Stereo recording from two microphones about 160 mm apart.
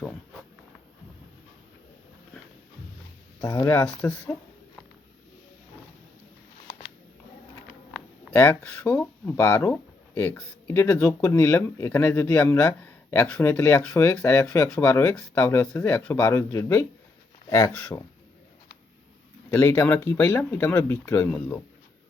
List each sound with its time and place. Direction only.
3.4 s speech: 25° left (ahead or behind)
8.3 s speech: 10° left (ahead or behind)
19.5 s speech: 15° left (ahead or behind)